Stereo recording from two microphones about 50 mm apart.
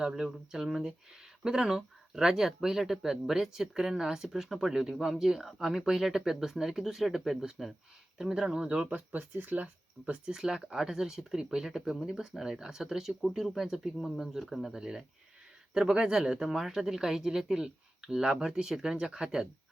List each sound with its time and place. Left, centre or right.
0.0 s speech: centre
9.0 s speech: right
10.1 s speech: centre